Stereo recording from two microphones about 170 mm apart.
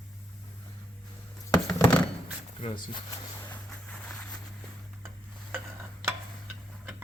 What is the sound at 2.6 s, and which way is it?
Speech, 30° left (ahead or behind).